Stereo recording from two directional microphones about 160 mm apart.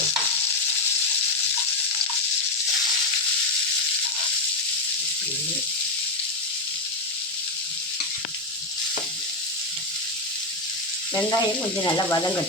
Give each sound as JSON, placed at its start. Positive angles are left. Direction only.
{"t": 11.1, "sound": "frying", "side_deg": 20}
{"t": 11.9, "sound": "sizzle", "side_deg": 25}